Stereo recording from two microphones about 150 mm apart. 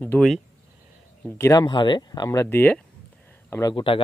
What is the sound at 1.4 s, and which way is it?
Speech, 25° left (ahead or behind).